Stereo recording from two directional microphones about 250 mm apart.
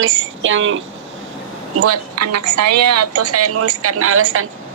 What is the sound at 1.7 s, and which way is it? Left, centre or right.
A woman's voice, right.